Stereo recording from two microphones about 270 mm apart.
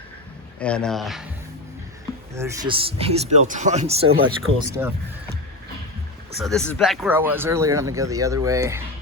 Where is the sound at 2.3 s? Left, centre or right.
Centre.